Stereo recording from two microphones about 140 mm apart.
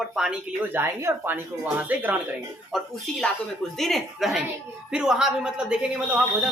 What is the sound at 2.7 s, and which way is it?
A man's voice, 5° left (ahead or behind).